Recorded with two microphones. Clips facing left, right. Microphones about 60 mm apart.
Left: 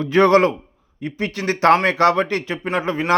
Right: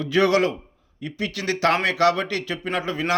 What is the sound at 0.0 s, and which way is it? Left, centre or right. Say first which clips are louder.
A man's voice: left 5 dB; left.